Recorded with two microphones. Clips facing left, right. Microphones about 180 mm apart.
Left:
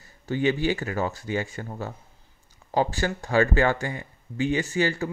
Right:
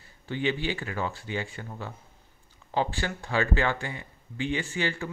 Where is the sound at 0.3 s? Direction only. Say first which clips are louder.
Left 5 dB; 45° left (ahead or behind).